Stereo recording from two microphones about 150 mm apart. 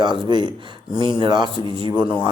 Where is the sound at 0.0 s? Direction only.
30° right (ahead or behind).